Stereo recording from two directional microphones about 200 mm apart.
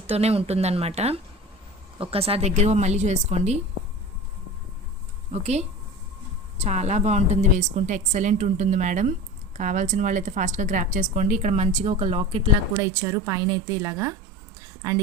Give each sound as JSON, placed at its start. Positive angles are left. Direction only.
{"t": 0.1, "sound": "a woman's voice", "side_deg": -30}
{"t": 5.3, "sound": "a woman's voice", "side_deg": -30}
{"t": 12.7, "sound": "a woman's voice", "side_deg": -15}